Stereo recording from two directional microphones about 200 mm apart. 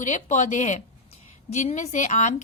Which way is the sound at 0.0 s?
40° left (ahead or behind).